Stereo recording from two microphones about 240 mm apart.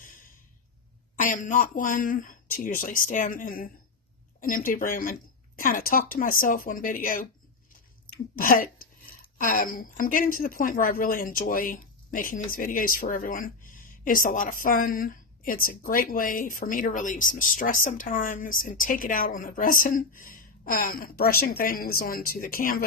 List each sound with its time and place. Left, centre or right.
1.1 s speech: left